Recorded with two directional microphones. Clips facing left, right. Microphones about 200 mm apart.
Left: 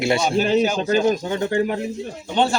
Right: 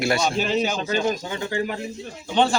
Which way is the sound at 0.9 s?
50° left (ahead or behind).